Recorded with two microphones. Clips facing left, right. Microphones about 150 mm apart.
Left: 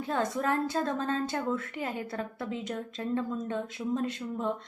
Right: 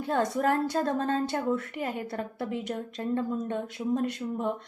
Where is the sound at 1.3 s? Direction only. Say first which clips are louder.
Right 3 dB; 20° right (ahead or behind).